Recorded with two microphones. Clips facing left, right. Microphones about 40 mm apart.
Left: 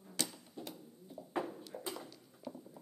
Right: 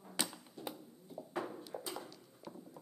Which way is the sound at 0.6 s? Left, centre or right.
Centre.